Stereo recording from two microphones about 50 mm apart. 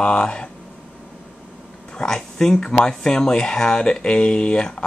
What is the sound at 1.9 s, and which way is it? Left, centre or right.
Speech, centre.